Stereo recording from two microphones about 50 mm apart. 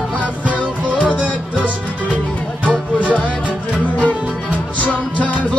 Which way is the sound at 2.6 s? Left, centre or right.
Right.